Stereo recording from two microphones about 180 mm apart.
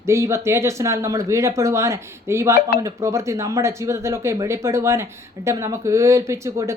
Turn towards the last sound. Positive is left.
turn(degrees=-15)  # may be behind; listen again after turning